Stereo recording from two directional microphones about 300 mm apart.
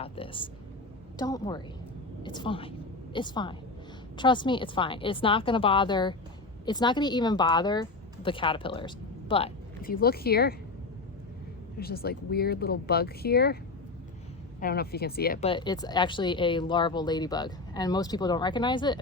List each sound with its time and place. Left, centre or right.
0.0 s a woman's voice: centre
11.8 s speech: left
14.6 s speech: left; by 18.9 s centre